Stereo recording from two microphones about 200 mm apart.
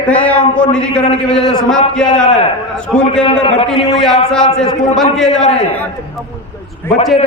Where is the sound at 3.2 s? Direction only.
25° left (ahead or behind).